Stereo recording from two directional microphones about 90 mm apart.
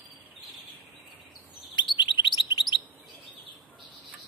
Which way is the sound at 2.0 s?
60° left (ahead or behind).